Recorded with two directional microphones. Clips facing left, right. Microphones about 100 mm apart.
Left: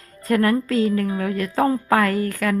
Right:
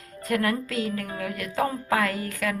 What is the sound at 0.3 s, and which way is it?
Speech, 40° left (ahead or behind).